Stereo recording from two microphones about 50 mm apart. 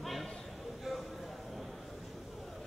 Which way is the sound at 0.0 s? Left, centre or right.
Centre.